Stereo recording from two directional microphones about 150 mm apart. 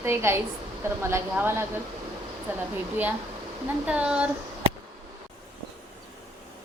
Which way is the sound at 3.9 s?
10° right (ahead or behind).